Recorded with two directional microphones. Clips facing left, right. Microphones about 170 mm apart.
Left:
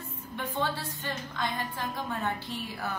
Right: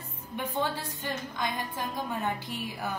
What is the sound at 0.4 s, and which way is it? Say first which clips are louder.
A woman's voice: right 1 dB; 15° right (ahead or behind).